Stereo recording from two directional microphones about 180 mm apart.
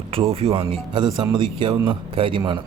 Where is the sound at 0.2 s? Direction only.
30° right (ahead or behind).